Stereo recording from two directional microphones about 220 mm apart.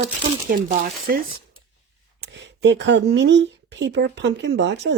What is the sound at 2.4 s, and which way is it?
Speech, 50° right (ahead or behind).